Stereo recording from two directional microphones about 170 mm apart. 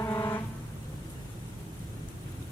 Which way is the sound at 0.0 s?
20° left (ahead or behind).